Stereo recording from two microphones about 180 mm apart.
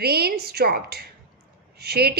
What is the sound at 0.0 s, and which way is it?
A woman's voice, 60° right (ahead or behind).